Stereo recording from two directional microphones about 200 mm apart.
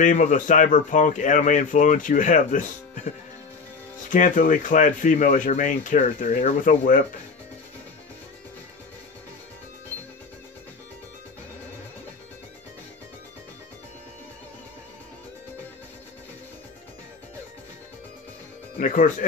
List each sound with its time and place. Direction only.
0.0 s speech: 40° left (ahead or behind)
4.1 s speech: 40° left (ahead or behind)
18.8 s speech: 40° left (ahead or behind)